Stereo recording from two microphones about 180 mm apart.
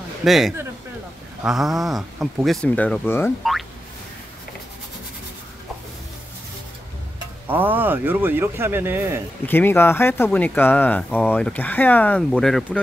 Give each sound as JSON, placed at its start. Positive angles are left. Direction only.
{"t": 0.2, "sound": "speech", "side_deg": 0}
{"t": 7.4, "sound": "speech", "side_deg": -10}
{"t": 9.5, "sound": "speech", "side_deg": 10}